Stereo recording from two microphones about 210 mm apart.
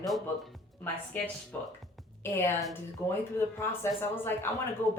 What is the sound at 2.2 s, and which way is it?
A woman's voice, 15° left (ahead or behind).